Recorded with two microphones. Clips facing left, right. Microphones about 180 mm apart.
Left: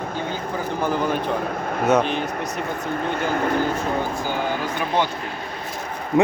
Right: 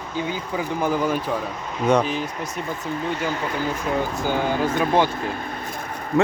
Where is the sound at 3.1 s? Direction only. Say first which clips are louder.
Left 6 dB; 55° left (ahead or behind).